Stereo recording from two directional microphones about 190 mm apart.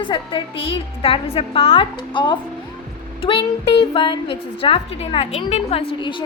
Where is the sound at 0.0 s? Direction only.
25° left (ahead or behind).